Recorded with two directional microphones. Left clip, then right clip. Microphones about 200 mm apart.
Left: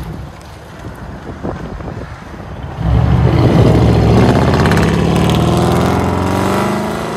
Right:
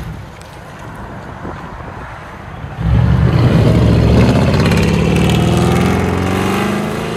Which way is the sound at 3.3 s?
50° left (ahead or behind).